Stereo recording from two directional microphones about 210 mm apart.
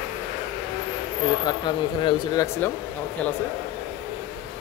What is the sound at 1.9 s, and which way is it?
Speech, 20° left (ahead or behind).